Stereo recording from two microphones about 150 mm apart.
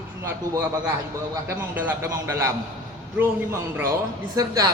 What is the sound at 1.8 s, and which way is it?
Speech, 15° right (ahead or behind).